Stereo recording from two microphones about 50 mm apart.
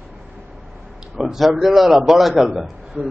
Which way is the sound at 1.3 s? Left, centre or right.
Centre.